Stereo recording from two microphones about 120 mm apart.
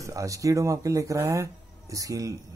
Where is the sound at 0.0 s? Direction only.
25° right (ahead or behind).